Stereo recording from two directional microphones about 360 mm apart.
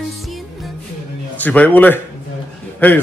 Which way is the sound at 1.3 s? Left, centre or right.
Centre.